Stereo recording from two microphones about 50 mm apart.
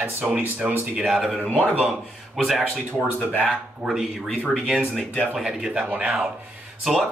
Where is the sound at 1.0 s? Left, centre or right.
Centre.